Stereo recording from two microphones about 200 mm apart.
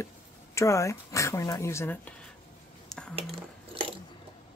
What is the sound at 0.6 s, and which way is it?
Speech, 15° left (ahead or behind).